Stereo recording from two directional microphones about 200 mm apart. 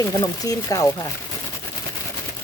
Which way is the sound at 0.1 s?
20° left (ahead or behind).